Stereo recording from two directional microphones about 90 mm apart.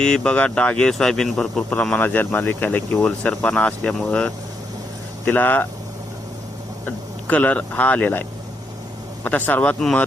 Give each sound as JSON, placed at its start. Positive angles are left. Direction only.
{"t": 0.0, "sound": "speech", "side_deg": 10}
{"t": 6.8, "sound": "speech", "side_deg": 15}